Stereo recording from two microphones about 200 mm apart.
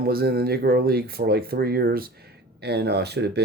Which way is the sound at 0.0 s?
50° right (ahead or behind).